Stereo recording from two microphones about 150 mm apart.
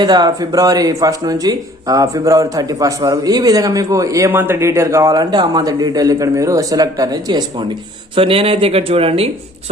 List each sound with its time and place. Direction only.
0.0 s speech: 30° right (ahead or behind)
8.1 s speech: 40° right (ahead or behind)